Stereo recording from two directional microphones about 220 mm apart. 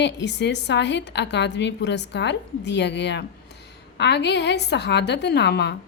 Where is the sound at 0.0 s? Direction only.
50° left (ahead or behind).